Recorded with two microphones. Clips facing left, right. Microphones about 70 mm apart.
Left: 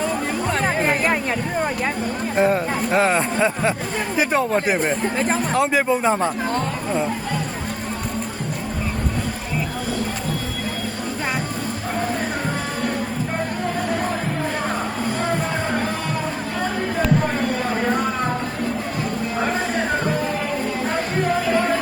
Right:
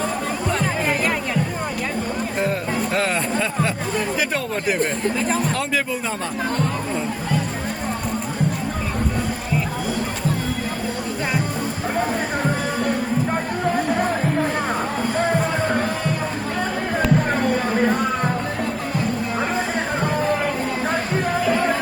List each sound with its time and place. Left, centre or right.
0.5 s music: left
2.3 s speech: left